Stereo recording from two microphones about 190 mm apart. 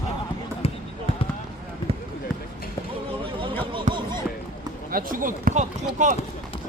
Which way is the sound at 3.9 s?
40° right (ahead or behind).